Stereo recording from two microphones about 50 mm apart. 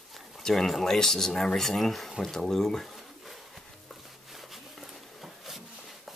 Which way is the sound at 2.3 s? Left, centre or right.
Centre.